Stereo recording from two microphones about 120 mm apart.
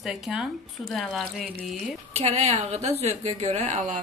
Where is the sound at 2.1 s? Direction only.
65° right (ahead or behind).